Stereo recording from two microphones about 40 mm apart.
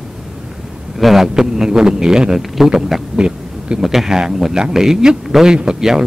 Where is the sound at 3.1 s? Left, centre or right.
Right.